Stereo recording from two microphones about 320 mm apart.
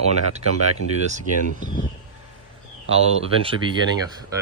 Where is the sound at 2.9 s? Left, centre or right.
Centre.